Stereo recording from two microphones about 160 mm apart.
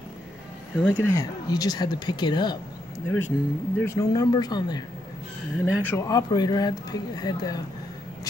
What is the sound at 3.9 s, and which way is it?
Speech, 25° left (ahead or behind).